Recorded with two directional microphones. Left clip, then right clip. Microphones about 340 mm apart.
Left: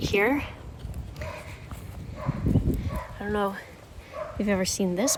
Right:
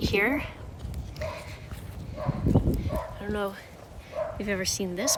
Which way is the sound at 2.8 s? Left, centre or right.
Centre.